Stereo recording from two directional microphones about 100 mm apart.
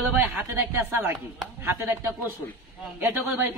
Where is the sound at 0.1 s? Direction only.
20° right (ahead or behind).